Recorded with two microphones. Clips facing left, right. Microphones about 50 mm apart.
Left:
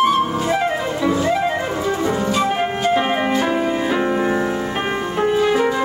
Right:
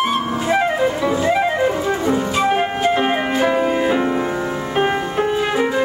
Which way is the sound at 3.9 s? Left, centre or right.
Centre.